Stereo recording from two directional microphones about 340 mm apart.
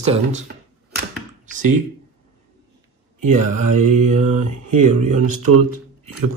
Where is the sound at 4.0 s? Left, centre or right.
Right.